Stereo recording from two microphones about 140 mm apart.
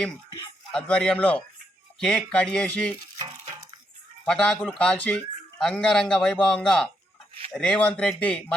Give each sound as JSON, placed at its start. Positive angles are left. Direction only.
{"t": 0.7, "sound": "a man's voice", "side_deg": 5}
{"t": 3.2, "sound": "a sound", "side_deg": -25}
{"t": 4.3, "sound": "a man's voice", "side_deg": 5}